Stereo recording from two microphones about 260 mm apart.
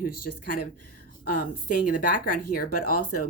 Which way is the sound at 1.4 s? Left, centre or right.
Left.